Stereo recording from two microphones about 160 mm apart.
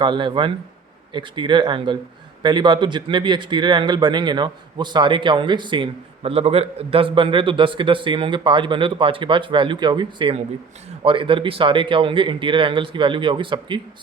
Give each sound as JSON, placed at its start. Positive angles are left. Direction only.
{"t": 0.0, "sound": "speech", "side_deg": -30}